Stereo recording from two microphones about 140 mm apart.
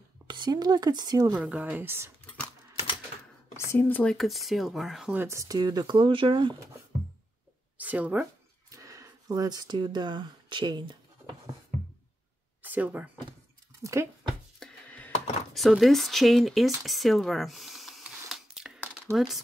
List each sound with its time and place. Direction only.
0.3 s speech: 30° right (ahead or behind)
1.3 s speech: 10° right (ahead or behind)
3.5 s speech: 15° left (ahead or behind); by 5.1 s centre (ahead or behind)
5.1 s speech: 20° right (ahead or behind); by 6.5 s 35° right (ahead or behind)
7.7 s speech: 10° right (ahead or behind)
8.6 s a sound: 25° right (ahead or behind)
12.6 s speech: 10° right (ahead or behind)
14.9 s a sound: 10° left (ahead or behind)
15.5 s speech: centre (ahead or behind)
16.8 s a sound: centre (ahead or behind)
19.1 s speech: centre (ahead or behind)